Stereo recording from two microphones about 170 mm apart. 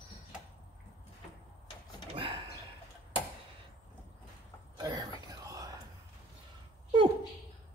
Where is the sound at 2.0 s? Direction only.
30° right (ahead or behind).